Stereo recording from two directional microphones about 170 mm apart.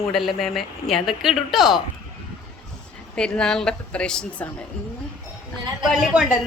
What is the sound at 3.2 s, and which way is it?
Speech, 5° left (ahead or behind).